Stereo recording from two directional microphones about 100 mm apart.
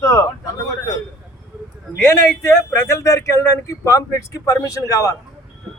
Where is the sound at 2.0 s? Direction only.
25° left (ahead or behind).